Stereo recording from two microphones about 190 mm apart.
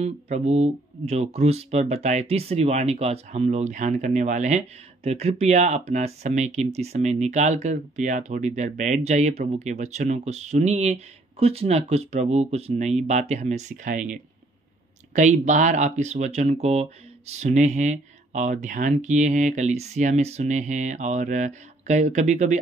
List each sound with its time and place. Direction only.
0.0 s speech: 35° right (ahead or behind)